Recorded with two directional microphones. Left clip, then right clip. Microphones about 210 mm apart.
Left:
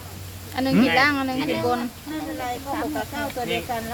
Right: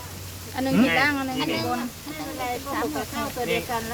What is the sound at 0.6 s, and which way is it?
Speech, 50° left (ahead or behind).